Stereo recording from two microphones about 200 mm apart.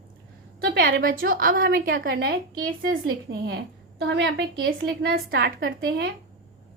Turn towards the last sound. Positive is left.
turn(degrees=-55)  # may be behind; listen again after turning